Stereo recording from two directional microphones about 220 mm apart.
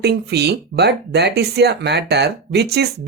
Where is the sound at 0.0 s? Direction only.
50° right (ahead or behind).